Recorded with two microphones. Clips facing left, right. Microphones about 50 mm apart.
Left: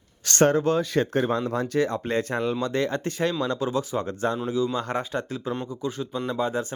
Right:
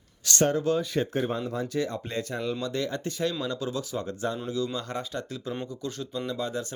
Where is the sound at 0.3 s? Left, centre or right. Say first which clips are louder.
Left 4 dB; left.